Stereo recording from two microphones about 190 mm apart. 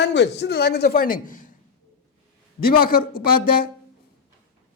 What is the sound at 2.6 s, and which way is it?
A man's voice, 50° left (ahead or behind).